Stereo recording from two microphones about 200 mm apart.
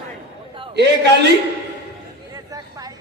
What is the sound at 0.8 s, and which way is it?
Speech, 55° right (ahead or behind).